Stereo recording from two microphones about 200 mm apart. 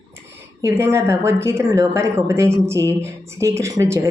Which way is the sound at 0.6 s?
15° right (ahead or behind).